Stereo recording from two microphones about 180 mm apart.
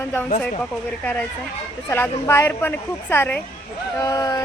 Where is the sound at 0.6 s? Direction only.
10° left (ahead or behind).